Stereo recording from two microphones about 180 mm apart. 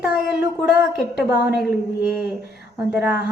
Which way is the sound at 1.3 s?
60° left (ahead or behind).